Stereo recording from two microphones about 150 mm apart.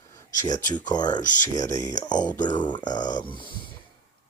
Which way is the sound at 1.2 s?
55° left (ahead or behind).